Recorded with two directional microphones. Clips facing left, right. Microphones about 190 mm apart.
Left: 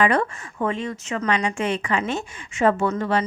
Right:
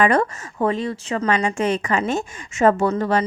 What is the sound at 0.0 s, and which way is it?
A woman's voice, 40° right (ahead or behind).